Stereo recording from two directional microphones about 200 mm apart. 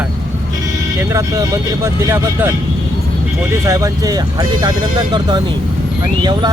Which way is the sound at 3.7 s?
15° right (ahead or behind).